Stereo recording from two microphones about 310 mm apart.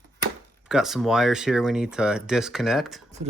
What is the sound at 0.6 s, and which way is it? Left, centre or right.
Speech, centre.